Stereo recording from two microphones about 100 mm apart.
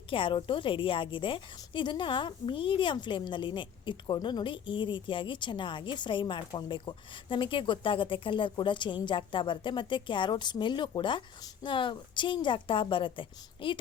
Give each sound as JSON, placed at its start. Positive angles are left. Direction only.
{"t": 0.1, "sound": "a woman's voice", "side_deg": 60}